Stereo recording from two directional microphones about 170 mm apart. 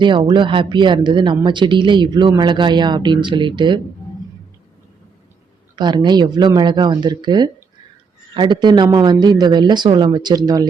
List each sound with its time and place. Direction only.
0.0 s speech: 30° right (ahead or behind)
5.7 s speech: 25° right (ahead or behind)